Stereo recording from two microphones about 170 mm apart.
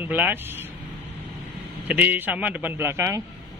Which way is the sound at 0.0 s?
10° right (ahead or behind).